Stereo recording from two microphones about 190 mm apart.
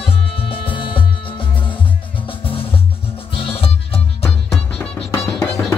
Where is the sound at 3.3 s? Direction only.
30° left (ahead or behind).